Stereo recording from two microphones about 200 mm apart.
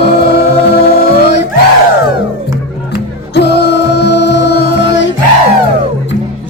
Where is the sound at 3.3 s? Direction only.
55° left (ahead or behind).